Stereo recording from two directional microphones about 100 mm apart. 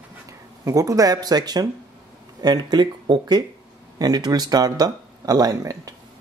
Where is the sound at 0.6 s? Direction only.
35° right (ahead or behind).